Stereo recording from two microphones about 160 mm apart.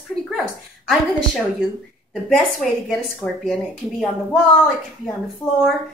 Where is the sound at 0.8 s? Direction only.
Centre (ahead or behind).